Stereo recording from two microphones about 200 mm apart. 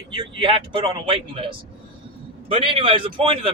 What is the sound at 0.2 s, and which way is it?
A man's voice, 25° right (ahead or behind).